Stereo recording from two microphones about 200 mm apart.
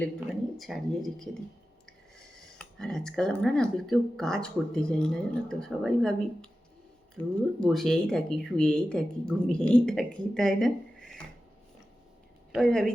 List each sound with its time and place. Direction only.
0.5 s speech: centre (ahead or behind)
12.5 s speech: centre (ahead or behind)